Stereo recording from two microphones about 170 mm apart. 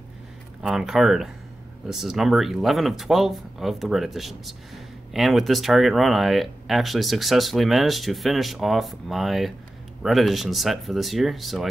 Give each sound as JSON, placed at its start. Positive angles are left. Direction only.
{"t": 0.6, "sound": "speech", "side_deg": 0}